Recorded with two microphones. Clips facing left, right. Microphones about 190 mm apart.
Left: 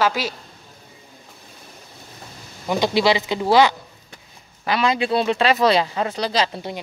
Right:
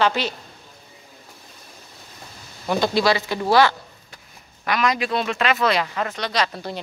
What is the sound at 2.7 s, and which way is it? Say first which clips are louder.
Speech: left 1 dB; 15° left (ahead or behind).